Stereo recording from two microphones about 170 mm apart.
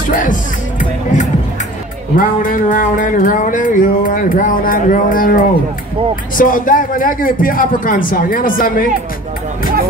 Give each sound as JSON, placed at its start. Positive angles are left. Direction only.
{"t": 0.0, "sound": "music", "side_deg": 55}
{"t": 2.1, "sound": "a sound", "side_deg": 55}
{"t": 6.3, "sound": "speech", "side_deg": 55}